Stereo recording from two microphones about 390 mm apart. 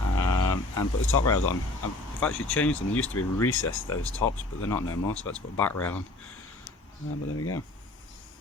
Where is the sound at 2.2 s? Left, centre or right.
Centre.